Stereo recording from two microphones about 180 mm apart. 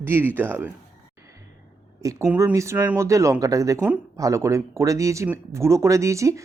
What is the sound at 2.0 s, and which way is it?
Speech, 15° right (ahead or behind).